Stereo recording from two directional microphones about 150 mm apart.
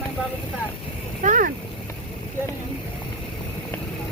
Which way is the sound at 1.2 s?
60° right (ahead or behind).